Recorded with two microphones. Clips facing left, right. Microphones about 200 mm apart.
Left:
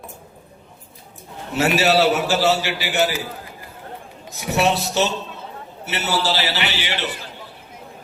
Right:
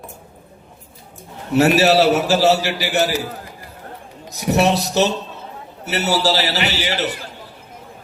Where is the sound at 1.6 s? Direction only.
40° right (ahead or behind).